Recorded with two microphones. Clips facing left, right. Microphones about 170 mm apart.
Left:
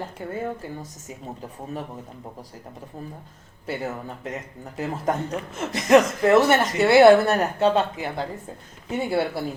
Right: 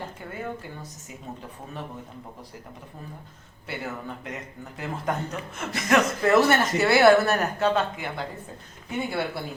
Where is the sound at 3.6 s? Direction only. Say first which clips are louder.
Left 4 dB; 40° left (ahead or behind).